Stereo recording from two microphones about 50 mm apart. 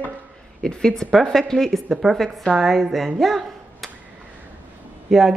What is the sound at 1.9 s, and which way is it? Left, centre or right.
Speech, centre.